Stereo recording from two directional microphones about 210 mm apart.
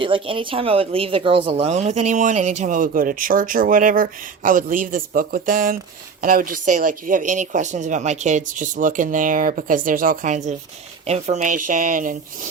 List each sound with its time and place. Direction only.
0.0 s speech: 25° right (ahead or behind); by 12.5 s 40° right (ahead or behind)